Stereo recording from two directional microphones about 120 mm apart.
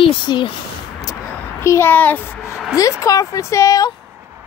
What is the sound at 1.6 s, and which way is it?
Speech, 20° left (ahead or behind).